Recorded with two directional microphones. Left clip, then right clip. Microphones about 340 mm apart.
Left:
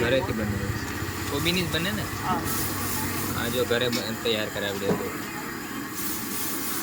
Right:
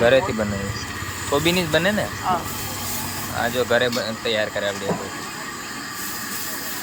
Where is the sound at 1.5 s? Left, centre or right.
Centre.